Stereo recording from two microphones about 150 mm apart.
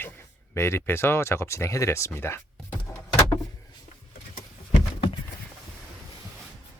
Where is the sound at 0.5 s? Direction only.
20° left (ahead or behind).